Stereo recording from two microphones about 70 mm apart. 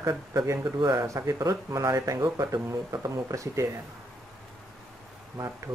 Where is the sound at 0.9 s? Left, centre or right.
Right.